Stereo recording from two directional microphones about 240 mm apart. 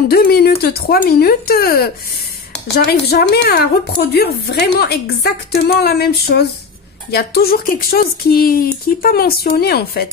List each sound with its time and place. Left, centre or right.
0.1 s speech: left
2.9 s a woman's voice: left